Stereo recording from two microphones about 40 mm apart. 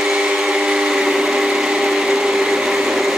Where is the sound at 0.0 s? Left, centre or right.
Centre.